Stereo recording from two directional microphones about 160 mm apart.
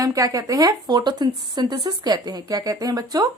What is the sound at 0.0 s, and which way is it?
Speech, 20° right (ahead or behind).